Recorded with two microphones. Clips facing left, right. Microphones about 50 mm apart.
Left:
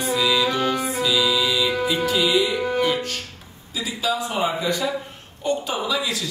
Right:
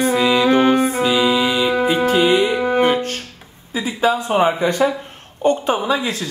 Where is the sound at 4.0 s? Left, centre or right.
Right.